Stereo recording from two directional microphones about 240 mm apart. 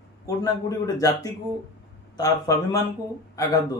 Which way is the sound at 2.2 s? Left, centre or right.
Centre.